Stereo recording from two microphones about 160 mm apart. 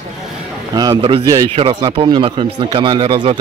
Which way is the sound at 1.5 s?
35° right (ahead or behind).